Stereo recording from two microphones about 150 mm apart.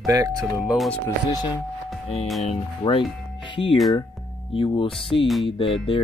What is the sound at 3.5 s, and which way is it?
Speech, 35° left (ahead or behind).